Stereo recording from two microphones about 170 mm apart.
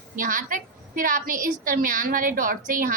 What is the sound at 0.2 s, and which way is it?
A woman's voice, 50° right (ahead or behind).